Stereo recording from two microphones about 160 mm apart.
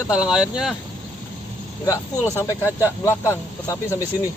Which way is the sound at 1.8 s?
20° left (ahead or behind).